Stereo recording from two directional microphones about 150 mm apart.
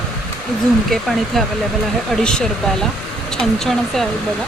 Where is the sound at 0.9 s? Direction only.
Centre (ahead or behind).